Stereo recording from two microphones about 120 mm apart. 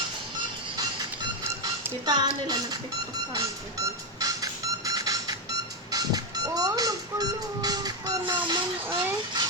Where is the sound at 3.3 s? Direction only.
30° right (ahead or behind).